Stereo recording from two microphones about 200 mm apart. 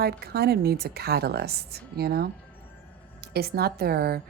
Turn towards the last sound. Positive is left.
turn(degrees=-50)  # may be behind; listen again after turning